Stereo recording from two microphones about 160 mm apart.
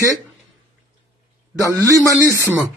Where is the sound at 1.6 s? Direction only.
20° right (ahead or behind).